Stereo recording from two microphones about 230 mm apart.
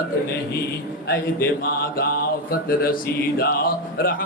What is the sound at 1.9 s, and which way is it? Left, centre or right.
Speech, left.